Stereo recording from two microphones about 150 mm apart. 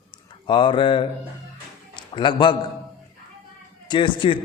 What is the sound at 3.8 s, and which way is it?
Speech, 30° left (ahead or behind).